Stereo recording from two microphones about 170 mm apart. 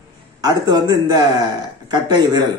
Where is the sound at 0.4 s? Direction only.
25° right (ahead or behind).